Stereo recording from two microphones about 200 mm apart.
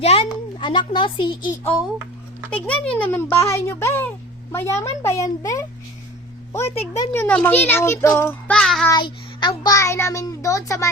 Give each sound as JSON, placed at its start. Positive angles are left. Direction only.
{"t": 0.0, "sound": "a child's voice", "side_deg": 30}
{"t": 2.6, "sound": "a child's voice", "side_deg": 5}
{"t": 8.9, "sound": "a child's voice", "side_deg": 25}